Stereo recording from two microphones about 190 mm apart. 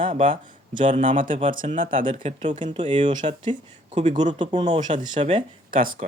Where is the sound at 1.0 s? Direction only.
45° right (ahead or behind).